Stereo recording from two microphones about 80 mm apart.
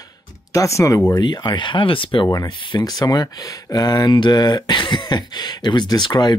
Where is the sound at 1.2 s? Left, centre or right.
Left.